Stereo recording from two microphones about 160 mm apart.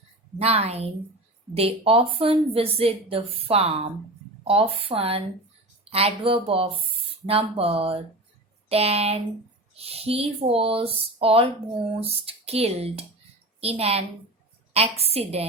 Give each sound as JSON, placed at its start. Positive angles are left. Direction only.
{"t": 0.3, "sound": "a woman's voice", "side_deg": -40}